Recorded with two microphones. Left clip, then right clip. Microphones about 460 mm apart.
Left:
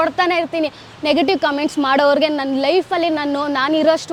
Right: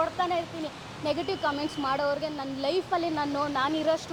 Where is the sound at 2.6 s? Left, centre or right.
Left.